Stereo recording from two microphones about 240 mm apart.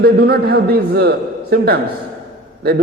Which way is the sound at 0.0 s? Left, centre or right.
Right.